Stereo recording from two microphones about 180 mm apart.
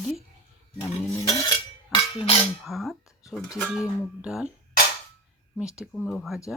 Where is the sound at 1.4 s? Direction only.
25° left (ahead or behind).